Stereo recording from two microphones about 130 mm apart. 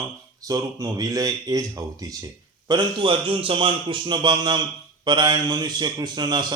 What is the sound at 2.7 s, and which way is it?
A man's voice, 40° right (ahead or behind).